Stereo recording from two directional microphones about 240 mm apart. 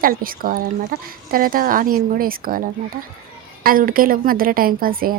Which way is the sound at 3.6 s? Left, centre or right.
Right.